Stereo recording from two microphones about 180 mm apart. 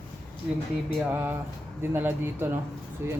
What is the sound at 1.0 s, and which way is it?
Speech, 10° right (ahead or behind).